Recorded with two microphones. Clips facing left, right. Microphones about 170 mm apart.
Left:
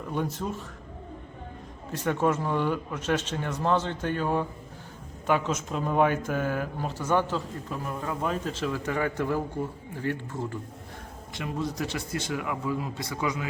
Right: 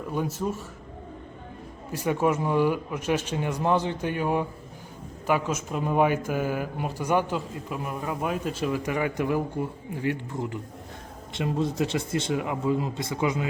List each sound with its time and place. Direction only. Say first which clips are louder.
0.1 s speech: right 2 dB; 5° right (ahead or behind)
1.9 s speech: right 1 dB; 10° right (ahead or behind)